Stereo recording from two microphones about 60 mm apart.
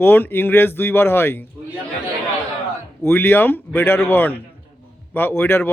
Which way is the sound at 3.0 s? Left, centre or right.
Left.